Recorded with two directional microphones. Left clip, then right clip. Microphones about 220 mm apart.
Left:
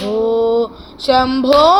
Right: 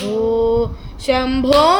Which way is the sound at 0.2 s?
20° right (ahead or behind).